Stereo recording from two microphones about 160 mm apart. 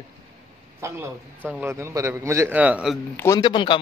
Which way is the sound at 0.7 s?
15° right (ahead or behind).